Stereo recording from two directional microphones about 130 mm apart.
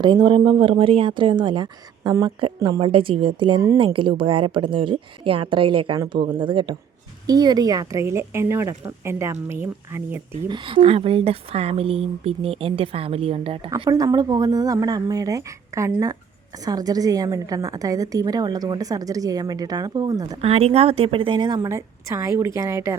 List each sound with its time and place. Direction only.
0.0 s a woman's voice: 35° right (ahead or behind); by 10.2 s 20° right (ahead or behind)
10.5 s a woman's voice: 40° right (ahead or behind)
13.9 s a woman's voice: 30° right (ahead or behind)
20.4 s a woman's voice: 50° right (ahead or behind); by 21.7 s 35° right (ahead or behind)
21.7 s a woman's voice: 20° right (ahead or behind)